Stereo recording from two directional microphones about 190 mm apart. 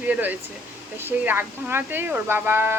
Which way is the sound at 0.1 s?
10° right (ahead or behind).